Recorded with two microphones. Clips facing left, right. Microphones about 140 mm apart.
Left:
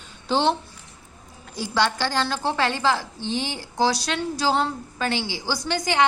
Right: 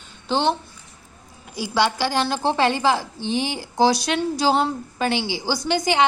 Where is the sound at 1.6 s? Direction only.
10° right (ahead or behind).